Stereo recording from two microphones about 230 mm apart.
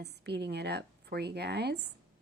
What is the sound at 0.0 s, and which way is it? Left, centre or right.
A woman's voice, right.